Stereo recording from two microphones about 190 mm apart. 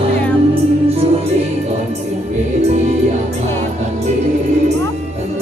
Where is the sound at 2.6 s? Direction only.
35° right (ahead or behind).